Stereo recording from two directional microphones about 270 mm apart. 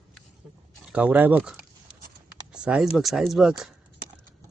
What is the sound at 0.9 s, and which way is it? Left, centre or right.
Speech, centre.